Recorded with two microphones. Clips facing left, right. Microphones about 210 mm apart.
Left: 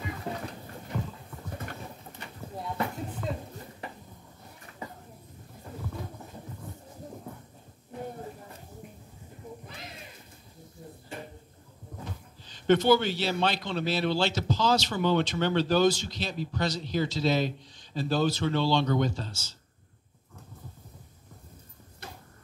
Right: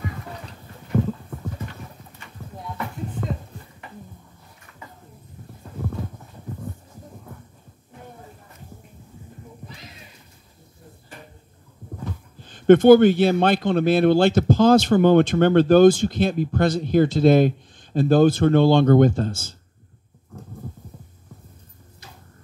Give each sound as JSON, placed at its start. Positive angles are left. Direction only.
{"t": 12.4, "sound": "a man's voice", "side_deg": -55}